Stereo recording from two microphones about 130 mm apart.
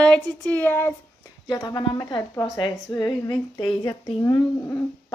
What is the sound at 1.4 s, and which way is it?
A woman's voice, 30° left (ahead or behind).